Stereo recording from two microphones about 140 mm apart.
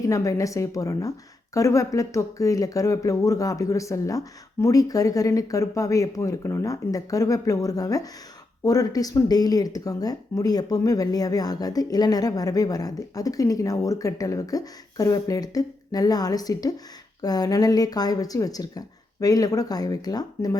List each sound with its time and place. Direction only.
0.1 s speech: 25° left (ahead or behind)